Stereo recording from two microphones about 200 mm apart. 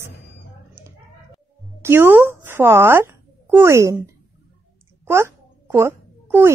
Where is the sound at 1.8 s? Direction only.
10° right (ahead or behind).